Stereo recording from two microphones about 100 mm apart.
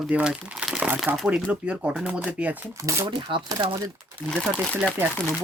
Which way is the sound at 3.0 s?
50° right (ahead or behind).